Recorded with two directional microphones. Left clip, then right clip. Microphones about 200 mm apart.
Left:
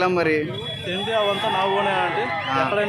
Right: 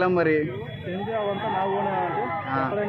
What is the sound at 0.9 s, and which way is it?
Speech, 20° left (ahead or behind).